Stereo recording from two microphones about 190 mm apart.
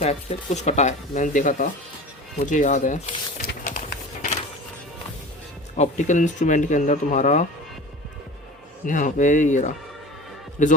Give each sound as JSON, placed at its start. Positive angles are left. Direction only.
{"t": 0.0, "sound": "speech", "side_deg": 35}
{"t": 2.5, "sound": "a sound", "side_deg": 40}
{"t": 5.7, "sound": "speech", "side_deg": 35}
{"t": 8.9, "sound": "speech", "side_deg": 40}